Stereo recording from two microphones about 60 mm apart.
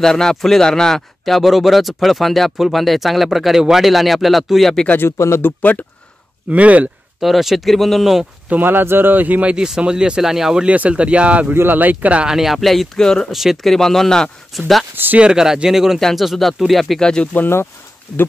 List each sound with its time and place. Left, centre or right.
0.0 s speech: centre
4.8 s speech: left
5.1 s speech: left
6.5 s speech: right
7.2 s speech: centre
8.5 s speech: right; by 10.7 s centre
10.7 s speech: right
11.5 s speech: right
12.3 s speech: centre
13.3 s speech: centre
13.7 s speech: centre
15.1 s speech: centre
16.0 s speech: centre
17.0 s speech: centre